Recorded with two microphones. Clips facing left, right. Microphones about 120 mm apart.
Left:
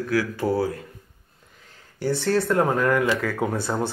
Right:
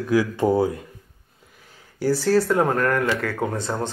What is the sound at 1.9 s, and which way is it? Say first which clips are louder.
Speech: right 3 dB; 5° right (ahead or behind).